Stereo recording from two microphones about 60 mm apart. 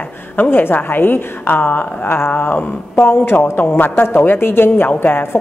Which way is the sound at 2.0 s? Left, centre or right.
Left.